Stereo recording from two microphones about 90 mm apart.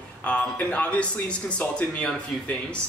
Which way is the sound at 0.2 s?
15° left (ahead or behind).